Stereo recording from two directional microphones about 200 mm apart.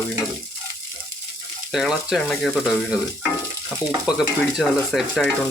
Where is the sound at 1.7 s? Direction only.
Centre (ahead or behind).